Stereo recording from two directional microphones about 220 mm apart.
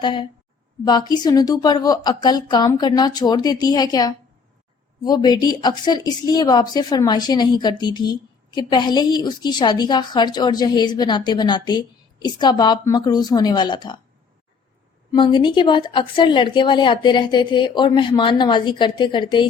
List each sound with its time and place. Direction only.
0.0 s a woman's voice: 20° left (ahead or behind)
15.1 s a woman's voice: 20° left (ahead or behind)